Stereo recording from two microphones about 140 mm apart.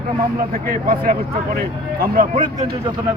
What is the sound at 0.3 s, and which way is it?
Speech, 85° right.